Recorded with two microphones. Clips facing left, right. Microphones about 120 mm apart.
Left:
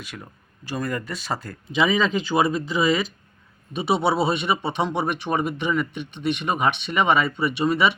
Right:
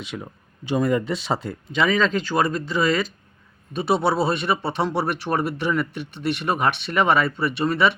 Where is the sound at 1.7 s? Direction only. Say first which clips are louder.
Even; 5° left (ahead or behind).